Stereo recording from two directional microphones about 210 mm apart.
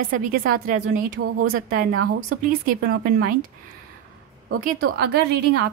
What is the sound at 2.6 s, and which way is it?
Speech, 45° right (ahead or behind).